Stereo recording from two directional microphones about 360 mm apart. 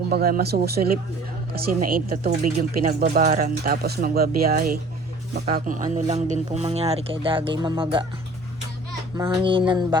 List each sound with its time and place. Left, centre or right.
0.1 s speech: right
9.1 s speech: centre